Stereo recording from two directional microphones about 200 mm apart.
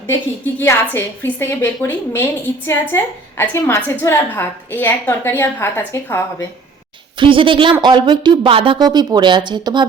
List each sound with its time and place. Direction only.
0.6 s a woman's voice: 10° left (ahead or behind)
7.2 s speech: 25° right (ahead or behind)